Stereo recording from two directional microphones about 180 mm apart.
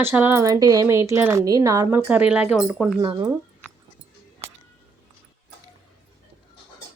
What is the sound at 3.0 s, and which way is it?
Speech, 25° right (ahead or behind).